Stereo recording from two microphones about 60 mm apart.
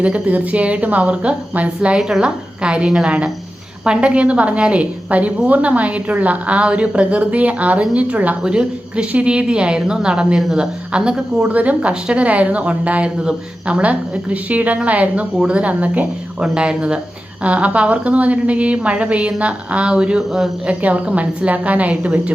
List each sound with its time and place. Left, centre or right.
0.0 s a woman's voice: right; by 20.5 s centre
20.7 s a woman's voice: right